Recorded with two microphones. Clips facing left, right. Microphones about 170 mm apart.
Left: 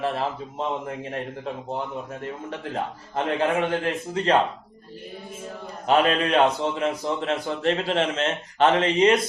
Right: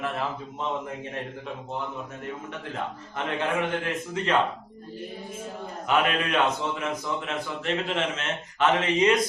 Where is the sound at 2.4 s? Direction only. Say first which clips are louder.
Left 6 dB; 35° left (ahead or behind).